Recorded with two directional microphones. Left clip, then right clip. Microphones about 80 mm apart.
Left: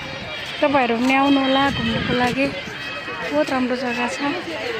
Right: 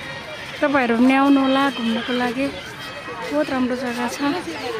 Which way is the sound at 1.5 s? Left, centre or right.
Right.